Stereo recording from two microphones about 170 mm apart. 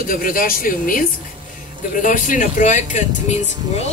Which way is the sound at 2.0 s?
50° left (ahead or behind).